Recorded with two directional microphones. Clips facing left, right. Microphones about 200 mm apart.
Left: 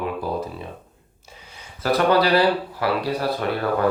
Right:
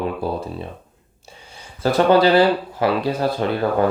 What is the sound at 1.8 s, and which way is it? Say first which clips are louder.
Speech: right 4 dB; 25° right (ahead or behind).